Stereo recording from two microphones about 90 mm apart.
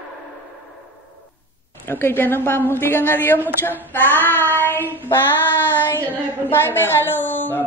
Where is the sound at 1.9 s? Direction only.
25° left (ahead or behind).